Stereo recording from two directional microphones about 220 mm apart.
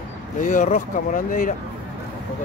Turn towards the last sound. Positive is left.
turn(degrees=35)  # may be behind; listen again after turning